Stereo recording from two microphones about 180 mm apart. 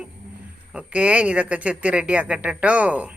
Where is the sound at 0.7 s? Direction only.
5° right (ahead or behind).